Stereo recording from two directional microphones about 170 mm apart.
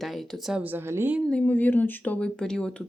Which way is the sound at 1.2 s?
5° left (ahead or behind).